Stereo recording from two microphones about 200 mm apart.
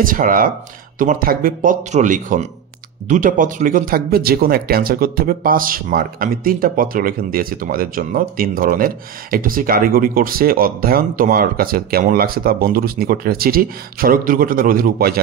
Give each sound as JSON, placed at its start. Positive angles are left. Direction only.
{"t": 0.0, "sound": "speech", "side_deg": -45}